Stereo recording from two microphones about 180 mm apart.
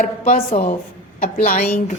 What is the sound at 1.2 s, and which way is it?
Speech, 50° left (ahead or behind).